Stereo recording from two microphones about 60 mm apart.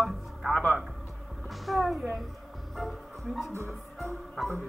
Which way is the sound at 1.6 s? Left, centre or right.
Centre.